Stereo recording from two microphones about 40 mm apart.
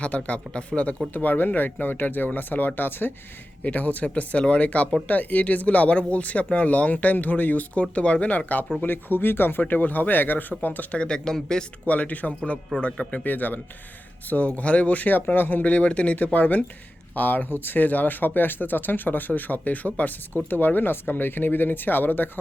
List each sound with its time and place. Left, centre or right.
0.0 s speech: left
1.1 s speech: left
3.6 s speech: left
7.7 s speech: left
8.8 s speech: left
10.9 s speech: left
11.9 s speech: left
13.2 s speech: left
15.6 s speech: left
16.1 s speech: left